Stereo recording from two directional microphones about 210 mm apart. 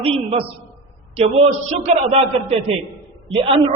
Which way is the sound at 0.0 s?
25° right (ahead or behind).